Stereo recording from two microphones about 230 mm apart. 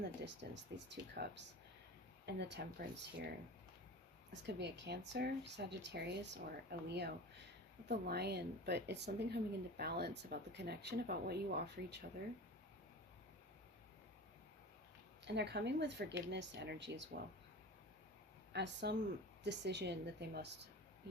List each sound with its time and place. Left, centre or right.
0.2 s speech: right
4.4 s speech: right
15.2 s speech: right
18.5 s speech: right